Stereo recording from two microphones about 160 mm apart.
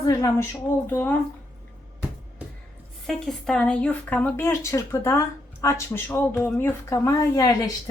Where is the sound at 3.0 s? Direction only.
Centre (ahead or behind).